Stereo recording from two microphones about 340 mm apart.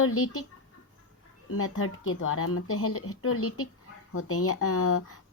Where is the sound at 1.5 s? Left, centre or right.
Left.